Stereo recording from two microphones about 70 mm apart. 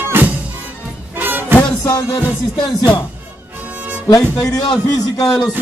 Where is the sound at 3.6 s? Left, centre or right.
Right.